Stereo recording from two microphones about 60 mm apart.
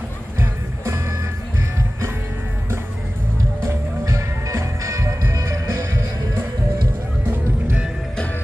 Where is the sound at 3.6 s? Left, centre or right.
Right.